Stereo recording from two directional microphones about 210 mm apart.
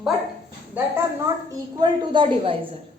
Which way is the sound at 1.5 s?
15° right (ahead or behind).